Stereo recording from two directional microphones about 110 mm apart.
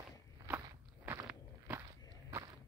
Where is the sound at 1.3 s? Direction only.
15° right (ahead or behind).